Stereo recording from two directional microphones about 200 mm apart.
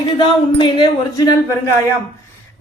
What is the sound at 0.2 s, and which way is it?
Speech, 25° left (ahead or behind).